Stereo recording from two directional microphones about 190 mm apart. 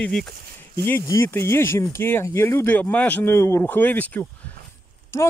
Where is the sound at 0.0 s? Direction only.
5° left (ahead or behind).